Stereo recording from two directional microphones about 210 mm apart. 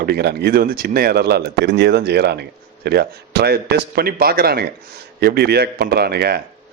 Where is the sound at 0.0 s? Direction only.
50° right (ahead or behind).